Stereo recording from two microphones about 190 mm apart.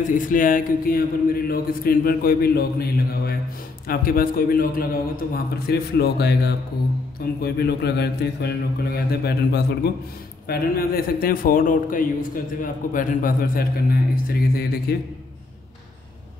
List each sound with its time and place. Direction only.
0.3 s a man's voice: 45° left (ahead or behind)